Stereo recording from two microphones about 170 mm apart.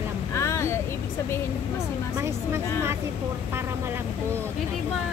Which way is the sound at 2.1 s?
15° right (ahead or behind).